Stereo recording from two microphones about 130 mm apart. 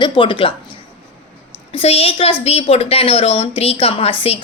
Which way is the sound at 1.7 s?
50° left (ahead or behind).